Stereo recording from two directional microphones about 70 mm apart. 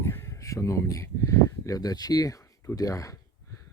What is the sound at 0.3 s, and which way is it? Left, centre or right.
Speech, left.